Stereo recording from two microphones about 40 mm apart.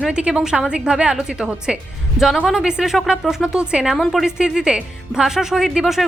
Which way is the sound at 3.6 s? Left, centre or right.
Right.